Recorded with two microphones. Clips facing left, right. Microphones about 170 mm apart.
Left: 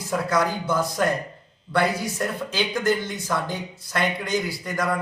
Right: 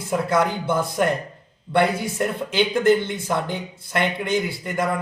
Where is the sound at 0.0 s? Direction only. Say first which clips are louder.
Right 2 dB; 25° right (ahead or behind).